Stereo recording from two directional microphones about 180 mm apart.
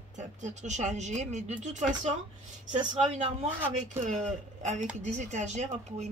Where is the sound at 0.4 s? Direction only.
40° right (ahead or behind).